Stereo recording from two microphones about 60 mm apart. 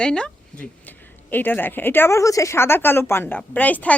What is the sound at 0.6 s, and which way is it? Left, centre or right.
Speech, left.